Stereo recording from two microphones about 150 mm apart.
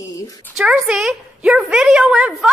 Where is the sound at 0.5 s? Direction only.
5° right (ahead or behind).